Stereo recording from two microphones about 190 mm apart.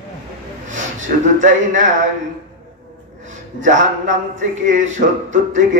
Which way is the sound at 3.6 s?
40° right (ahead or behind).